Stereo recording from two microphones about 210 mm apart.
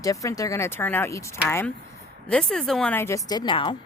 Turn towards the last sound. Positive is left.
turn(degrees=20)  # may be behind; listen again after turning